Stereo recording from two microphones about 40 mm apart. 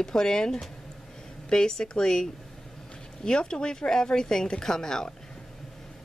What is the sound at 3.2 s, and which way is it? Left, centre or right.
Speech, centre.